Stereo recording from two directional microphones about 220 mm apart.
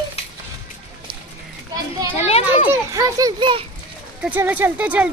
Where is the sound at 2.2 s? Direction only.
25° left (ahead or behind).